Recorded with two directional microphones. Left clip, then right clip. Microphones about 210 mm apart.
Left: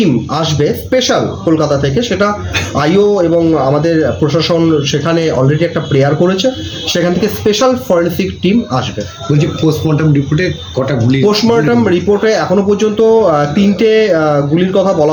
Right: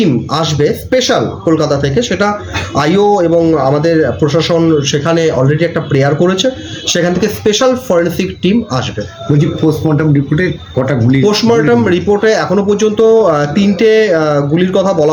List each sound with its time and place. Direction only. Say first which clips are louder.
0.0 s speech: even; 5° right (ahead or behind)
9.4 s speech: right 1 dB; 35° right (ahead or behind)
11.3 s speech: right 1 dB; 5° right (ahead or behind)